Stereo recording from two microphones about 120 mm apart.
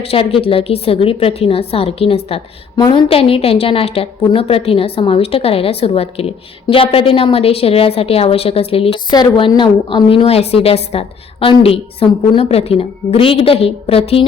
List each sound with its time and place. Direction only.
0.1 s a woman's voice: 50° left (ahead or behind)
2.7 s a woman's voice: 35° left (ahead or behind)
3.1 s a woman's voice: 50° left (ahead or behind)
9.0 s a woman's voice: 40° left (ahead or behind)